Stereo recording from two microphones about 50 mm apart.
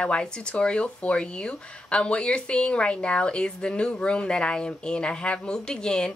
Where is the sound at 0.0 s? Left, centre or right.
Centre.